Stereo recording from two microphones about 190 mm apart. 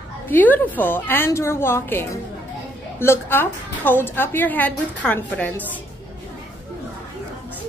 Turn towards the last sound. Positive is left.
turn(degrees=10)  # may be behind; listen again after turning